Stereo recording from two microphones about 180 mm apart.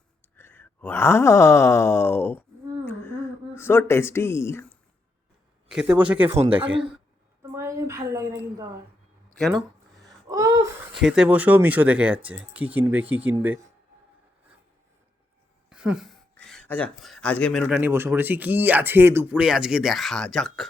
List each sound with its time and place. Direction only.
0.3 s groan: 10° left (ahead or behind)
2.8 s a sound: 10° left (ahead or behind)
5.7 s speech: 5° right (ahead or behind)
7.5 s a woman's voice: 15° right (ahead or behind)
10.0 s wail: 20° right (ahead or behind)
10.9 s speech: 5° right (ahead or behind)
15.7 s a sound: 5° right (ahead or behind)
17.7 s speech: 10° right (ahead or behind)